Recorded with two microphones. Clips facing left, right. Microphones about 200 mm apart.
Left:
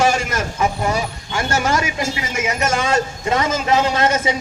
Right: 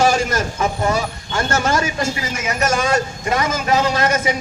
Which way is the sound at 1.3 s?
15° left (ahead or behind).